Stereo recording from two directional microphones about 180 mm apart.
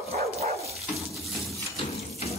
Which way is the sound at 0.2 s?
35° right (ahead or behind).